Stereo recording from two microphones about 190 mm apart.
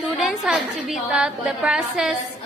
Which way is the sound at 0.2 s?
Centre (ahead or behind).